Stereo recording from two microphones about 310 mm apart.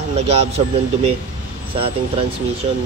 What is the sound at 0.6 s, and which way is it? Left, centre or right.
Speech, centre.